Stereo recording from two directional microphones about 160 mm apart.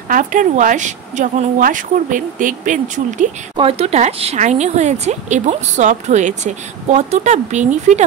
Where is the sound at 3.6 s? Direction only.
35° right (ahead or behind).